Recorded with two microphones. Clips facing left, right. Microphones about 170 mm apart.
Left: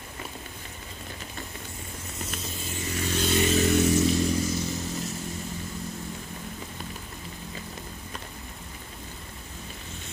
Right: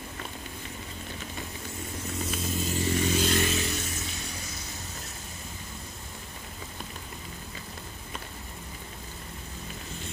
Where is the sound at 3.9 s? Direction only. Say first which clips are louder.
Left 17 dB; 90° left.